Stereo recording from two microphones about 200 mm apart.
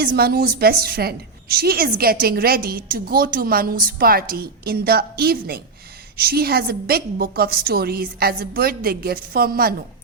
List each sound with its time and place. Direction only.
0.0 s a woman's voice: 50° right (ahead or behind)